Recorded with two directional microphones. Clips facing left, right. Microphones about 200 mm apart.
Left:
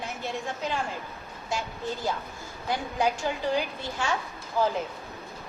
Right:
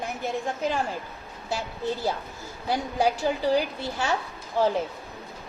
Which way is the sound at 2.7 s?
35° right (ahead or behind).